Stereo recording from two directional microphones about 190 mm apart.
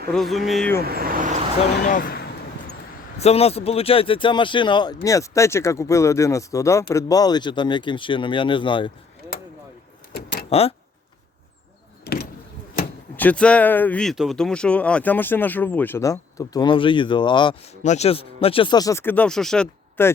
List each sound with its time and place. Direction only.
0.1 s speech: centre (ahead or behind)
0.8 s speech: 50° right (ahead or behind)
1.8 s speech: 45° left (ahead or behind)
3.2 s speech: 35° left (ahead or behind)
10.1 s a sound: 55° left (ahead or behind)
10.5 s speech: 30° left (ahead or behind)
12.0 s vehicle: 55° left (ahead or behind)
13.1 s speech: 5° left (ahead or behind); by 17.6 s 25° left (ahead or behind)
17.8 s speech: 35° left (ahead or behind); by 20.1 s 10° left (ahead or behind)